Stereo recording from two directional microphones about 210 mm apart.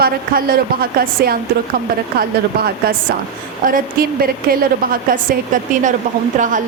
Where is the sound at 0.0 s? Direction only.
45° right (ahead or behind).